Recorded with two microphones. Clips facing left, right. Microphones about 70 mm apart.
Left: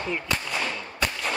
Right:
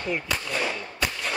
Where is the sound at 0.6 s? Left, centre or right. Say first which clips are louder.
Even; centre.